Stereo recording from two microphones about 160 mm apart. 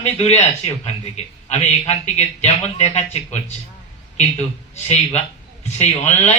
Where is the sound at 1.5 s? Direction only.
45° left (ahead or behind).